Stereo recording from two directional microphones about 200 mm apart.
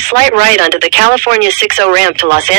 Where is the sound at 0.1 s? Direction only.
40° right (ahead or behind).